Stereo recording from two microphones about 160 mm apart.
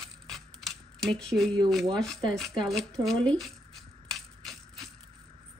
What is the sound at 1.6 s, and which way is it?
Speech, centre (ahead or behind).